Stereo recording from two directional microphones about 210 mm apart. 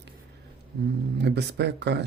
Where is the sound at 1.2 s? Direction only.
55° right (ahead or behind).